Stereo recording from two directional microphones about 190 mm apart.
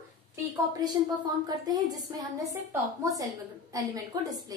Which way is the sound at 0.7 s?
20° right (ahead or behind).